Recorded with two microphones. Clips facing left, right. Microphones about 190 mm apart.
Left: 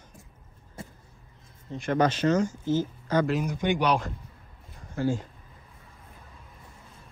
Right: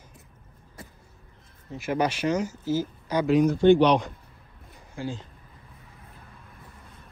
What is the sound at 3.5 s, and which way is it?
Speech, 15° left (ahead or behind).